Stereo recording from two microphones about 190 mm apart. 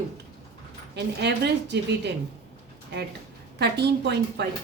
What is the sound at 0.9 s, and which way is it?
Speech, 65° right (ahead or behind).